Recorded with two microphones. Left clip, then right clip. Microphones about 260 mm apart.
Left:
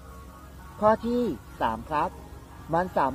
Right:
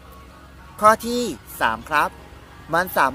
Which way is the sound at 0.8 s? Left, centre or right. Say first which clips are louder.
Right 6 dB; right.